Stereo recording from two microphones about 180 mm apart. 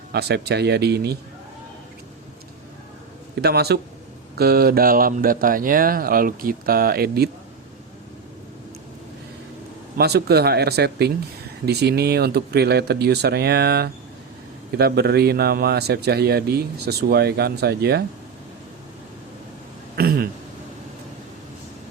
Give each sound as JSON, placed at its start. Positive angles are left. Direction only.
{"t": 0.1, "sound": "a man's voice", "side_deg": -65}
{"t": 3.4, "sound": "a man's voice", "side_deg": -65}
{"t": 10.0, "sound": "a man's voice", "side_deg": -60}
{"t": 20.0, "sound": "a sound", "side_deg": -55}